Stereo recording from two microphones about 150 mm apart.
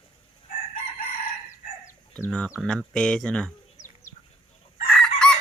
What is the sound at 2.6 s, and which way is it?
Speech, 5° left (ahead or behind).